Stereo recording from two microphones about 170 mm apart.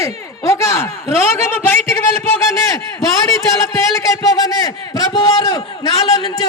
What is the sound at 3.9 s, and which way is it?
A man's voice, 20° left (ahead or behind).